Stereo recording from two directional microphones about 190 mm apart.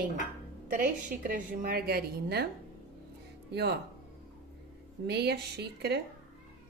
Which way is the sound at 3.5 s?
60° right (ahead or behind).